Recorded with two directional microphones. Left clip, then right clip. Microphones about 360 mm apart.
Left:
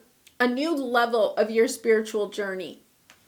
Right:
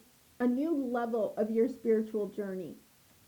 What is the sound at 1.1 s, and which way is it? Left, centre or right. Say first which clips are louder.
Speech: left 9 dB; centre.